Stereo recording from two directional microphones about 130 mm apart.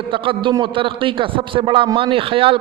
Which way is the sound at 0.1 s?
40° right (ahead or behind).